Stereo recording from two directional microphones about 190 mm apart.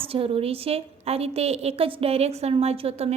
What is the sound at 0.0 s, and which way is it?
A woman's voice, 30° right (ahead or behind).